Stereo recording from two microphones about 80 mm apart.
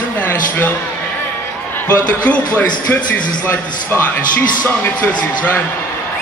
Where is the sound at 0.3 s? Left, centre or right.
Left.